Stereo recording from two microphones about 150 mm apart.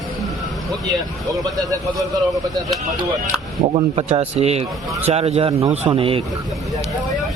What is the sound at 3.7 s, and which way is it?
Speech, 45° right (ahead or behind).